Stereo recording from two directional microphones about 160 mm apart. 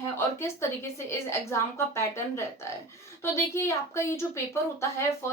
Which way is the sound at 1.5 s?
15° left (ahead or behind).